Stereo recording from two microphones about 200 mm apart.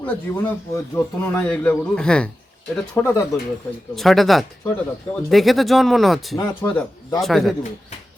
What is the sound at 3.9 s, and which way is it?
Speech, centre (ahead or behind).